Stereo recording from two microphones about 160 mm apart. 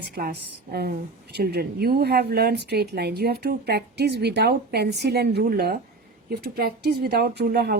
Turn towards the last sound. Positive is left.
turn(degrees=-90)